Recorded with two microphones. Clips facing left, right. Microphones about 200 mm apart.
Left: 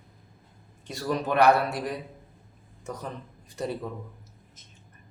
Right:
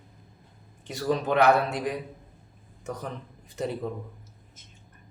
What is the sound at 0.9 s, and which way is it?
Speech, 20° right (ahead or behind).